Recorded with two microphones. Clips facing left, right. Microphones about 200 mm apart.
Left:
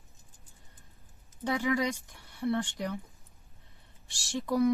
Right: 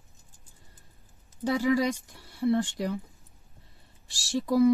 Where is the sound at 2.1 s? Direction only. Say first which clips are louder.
Right 6 dB; 35° right (ahead or behind).